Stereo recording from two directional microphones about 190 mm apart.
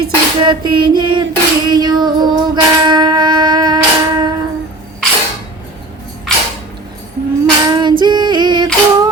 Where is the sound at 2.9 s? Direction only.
25° right (ahead or behind).